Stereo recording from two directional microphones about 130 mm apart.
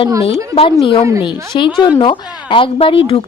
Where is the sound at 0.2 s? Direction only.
45° left (ahead or behind).